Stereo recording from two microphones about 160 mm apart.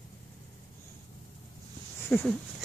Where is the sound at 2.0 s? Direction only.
10° left (ahead or behind).